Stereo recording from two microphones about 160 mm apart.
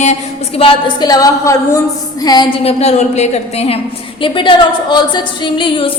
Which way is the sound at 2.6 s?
40° left (ahead or behind).